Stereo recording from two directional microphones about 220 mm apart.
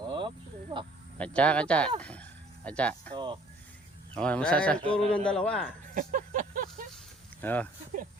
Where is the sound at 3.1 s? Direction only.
20° right (ahead or behind).